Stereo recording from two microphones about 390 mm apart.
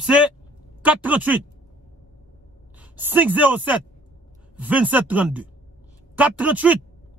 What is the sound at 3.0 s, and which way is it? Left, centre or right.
A man's voice, centre.